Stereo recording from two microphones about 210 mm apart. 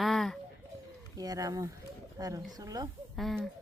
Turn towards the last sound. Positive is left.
turn(degrees=0)  # may be behind; listen again after turning